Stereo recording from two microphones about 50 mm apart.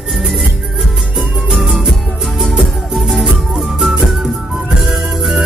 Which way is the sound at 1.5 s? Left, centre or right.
Centre.